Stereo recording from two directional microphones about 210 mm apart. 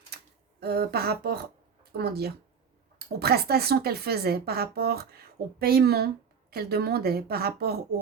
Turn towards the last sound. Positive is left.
turn(degrees=-50)  # may be behind; listen again after turning